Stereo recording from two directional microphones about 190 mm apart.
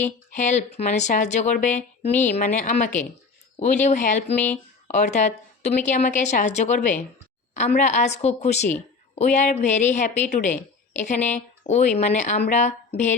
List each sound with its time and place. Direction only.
0.3 s speech: 40° left (ahead or behind)